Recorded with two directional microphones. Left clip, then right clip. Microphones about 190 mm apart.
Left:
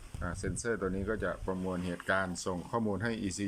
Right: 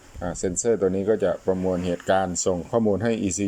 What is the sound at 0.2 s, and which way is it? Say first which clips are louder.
Speech: right 12 dB; 20° right (ahead or behind).